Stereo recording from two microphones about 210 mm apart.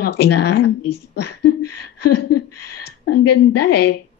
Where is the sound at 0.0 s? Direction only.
50° left (ahead or behind).